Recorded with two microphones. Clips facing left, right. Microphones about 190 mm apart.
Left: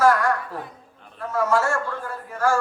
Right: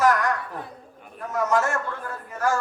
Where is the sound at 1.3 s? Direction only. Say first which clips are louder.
Left 1 dB; 20° right (ahead or behind).